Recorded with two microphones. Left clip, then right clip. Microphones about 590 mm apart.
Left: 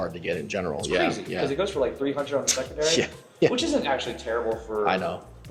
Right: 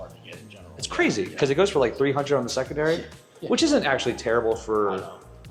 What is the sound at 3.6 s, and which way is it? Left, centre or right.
Speech, right.